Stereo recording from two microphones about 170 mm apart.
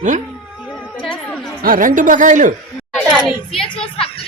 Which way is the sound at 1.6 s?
55° right (ahead or behind).